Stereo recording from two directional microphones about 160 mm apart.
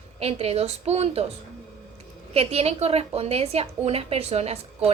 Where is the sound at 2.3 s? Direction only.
40° right (ahead or behind).